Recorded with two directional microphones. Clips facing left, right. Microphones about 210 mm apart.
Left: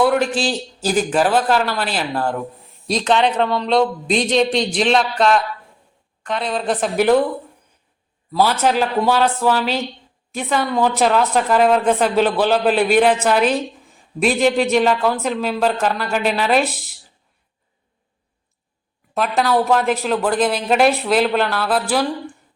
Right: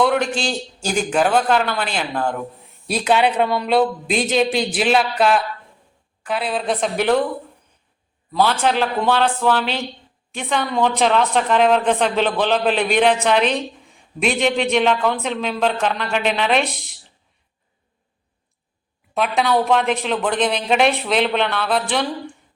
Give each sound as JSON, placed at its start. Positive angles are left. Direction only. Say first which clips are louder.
{"t": 0.0, "sound": "a sound", "louder": "left 2 dB", "side_deg": 0}
{"t": 0.3, "sound": "a woman's voice", "louder": "left 3 dB", "side_deg": 5}
{"t": 2.8, "sound": "a woman's voice", "louder": "even", "side_deg": -10}
{"t": 8.3, "sound": "a man's voice", "louder": "left 1 dB", "side_deg": 10}
{"t": 19.1, "sound": "a woman's voice", "louder": "left 1 dB", "side_deg": 0}